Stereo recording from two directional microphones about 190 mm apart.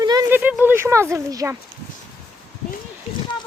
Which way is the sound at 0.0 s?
20° right (ahead or behind).